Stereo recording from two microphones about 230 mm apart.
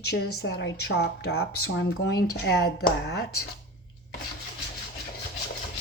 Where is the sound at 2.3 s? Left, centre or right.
Left.